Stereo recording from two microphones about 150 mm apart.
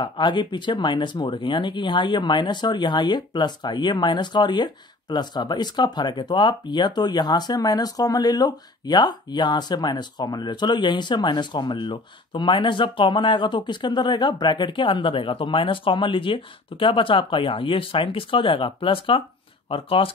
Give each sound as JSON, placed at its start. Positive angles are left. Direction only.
{"t": 0.0, "sound": "speech", "side_deg": 30}